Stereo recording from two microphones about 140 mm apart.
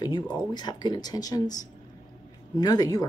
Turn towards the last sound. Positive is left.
turn(degrees=25)  # may be behind; listen again after turning